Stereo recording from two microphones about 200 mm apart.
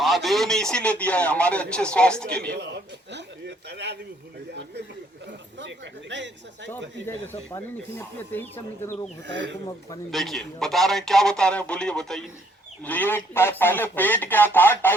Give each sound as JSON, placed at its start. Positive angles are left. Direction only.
{"t": 0.0, "sound": "a man's voice", "side_deg": 0}
{"t": 2.5, "sound": "a sound", "side_deg": -60}
{"t": 5.5, "sound": "a man's voice", "side_deg": -65}
{"t": 7.5, "sound": "speech", "side_deg": 10}
{"t": 9.2, "sound": "a man's voice", "side_deg": -60}
{"t": 10.1, "sound": "a man's voice", "side_deg": 0}